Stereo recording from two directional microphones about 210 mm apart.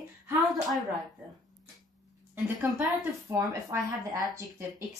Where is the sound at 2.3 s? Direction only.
5° right (ahead or behind).